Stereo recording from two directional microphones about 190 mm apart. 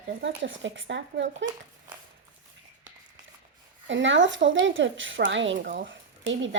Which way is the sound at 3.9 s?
75° right (ahead or behind).